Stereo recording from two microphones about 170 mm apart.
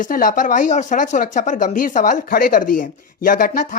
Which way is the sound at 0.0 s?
50° left (ahead or behind).